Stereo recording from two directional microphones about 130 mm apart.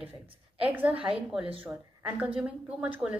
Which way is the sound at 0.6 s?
10° right (ahead or behind).